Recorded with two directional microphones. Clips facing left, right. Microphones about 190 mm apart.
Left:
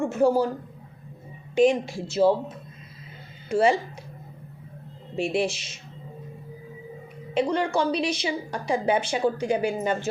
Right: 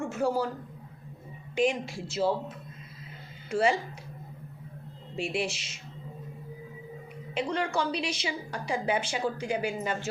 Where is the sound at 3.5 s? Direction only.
25° left (ahead or behind).